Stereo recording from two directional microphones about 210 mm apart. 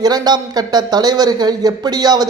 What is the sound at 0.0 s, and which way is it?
Speech, 20° right (ahead or behind).